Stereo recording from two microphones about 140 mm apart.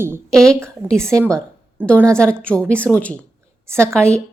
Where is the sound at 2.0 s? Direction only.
5° left (ahead or behind).